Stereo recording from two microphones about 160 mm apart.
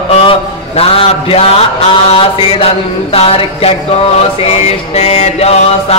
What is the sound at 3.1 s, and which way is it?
Mantra, 40° left (ahead or behind).